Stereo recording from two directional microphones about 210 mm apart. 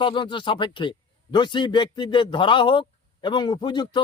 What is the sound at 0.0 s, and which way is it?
A man's voice, 20° left (ahead or behind).